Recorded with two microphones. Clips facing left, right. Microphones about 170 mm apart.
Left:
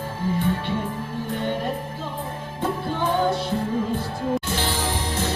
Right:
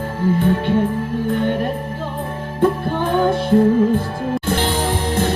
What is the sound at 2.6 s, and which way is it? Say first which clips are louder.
Music: right 8 dB; 55° right (ahead or behind).